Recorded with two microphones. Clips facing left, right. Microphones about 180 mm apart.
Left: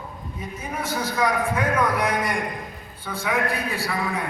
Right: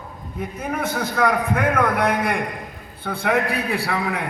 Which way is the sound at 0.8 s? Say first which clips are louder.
Right 2 dB; 55° right (ahead or behind).